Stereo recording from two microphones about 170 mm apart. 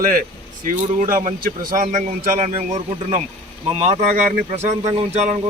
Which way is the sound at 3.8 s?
40° right (ahead or behind).